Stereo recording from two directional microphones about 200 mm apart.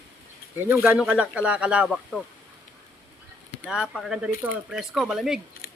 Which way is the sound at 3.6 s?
5° right (ahead or behind).